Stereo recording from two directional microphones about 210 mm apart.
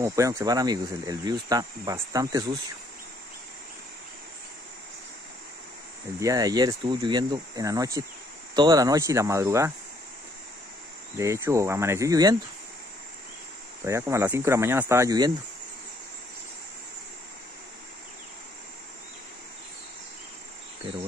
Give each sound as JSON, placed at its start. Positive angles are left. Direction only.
{"t": 0.0, "sound": "speech", "side_deg": -15}
{"t": 6.1, "sound": "speech", "side_deg": -15}
{"t": 11.1, "sound": "speech", "side_deg": -15}
{"t": 13.8, "sound": "speech", "side_deg": -15}